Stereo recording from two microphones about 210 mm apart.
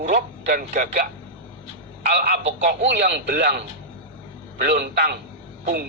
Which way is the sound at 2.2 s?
45° right (ahead or behind).